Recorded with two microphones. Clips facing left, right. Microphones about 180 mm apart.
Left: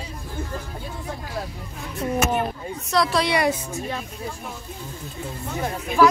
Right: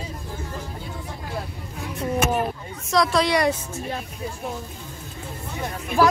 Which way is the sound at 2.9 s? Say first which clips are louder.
Right 1 dB; centre (ahead or behind).